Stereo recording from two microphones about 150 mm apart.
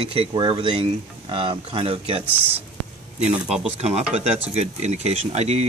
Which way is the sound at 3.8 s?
45° right (ahead or behind).